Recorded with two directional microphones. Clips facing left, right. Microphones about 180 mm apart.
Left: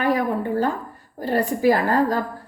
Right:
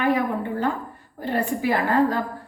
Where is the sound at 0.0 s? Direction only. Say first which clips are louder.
Left 1 dB; 35° left (ahead or behind).